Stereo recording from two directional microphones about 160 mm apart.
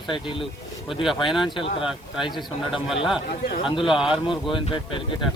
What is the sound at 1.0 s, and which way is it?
Speech, centre (ahead or behind).